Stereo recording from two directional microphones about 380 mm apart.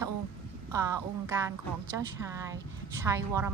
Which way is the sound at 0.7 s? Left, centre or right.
Centre.